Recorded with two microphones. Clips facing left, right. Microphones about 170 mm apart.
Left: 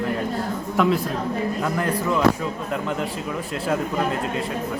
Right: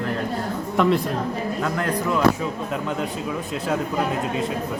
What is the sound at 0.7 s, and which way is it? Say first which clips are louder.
Speech: right 1 dB; centre (ahead or behind).